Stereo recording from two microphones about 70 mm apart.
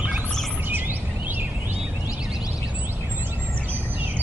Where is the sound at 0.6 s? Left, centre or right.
Right.